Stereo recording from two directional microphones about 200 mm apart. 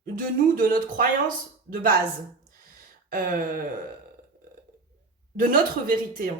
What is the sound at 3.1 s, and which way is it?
Speech, 45° right (ahead or behind).